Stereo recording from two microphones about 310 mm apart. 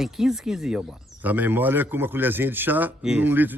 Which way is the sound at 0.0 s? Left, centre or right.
Centre.